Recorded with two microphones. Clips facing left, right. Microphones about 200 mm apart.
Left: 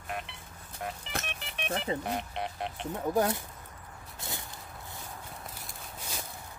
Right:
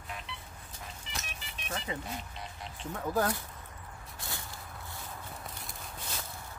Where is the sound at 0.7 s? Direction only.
60° left (ahead or behind).